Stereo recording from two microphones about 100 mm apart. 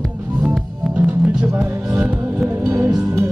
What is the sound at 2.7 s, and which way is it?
Music, 30° right (ahead or behind).